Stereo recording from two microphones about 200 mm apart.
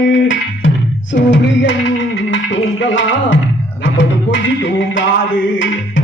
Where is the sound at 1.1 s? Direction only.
65° left (ahead or behind).